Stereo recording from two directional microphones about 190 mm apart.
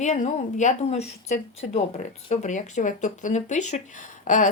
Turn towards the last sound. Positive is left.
turn(degrees=40)  # may be behind; listen again after turning